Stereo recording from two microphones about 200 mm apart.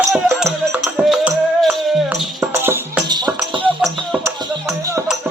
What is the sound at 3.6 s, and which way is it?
Music, 5° right (ahead or behind).